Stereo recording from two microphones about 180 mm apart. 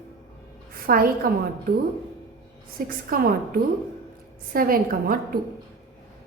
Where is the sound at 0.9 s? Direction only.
55° right (ahead or behind).